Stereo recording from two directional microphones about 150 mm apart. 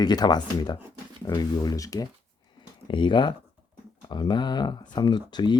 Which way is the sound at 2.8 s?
35° left (ahead or behind).